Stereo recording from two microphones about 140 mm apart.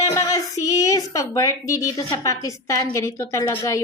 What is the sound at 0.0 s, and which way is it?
A woman's voice, 25° left (ahead or behind).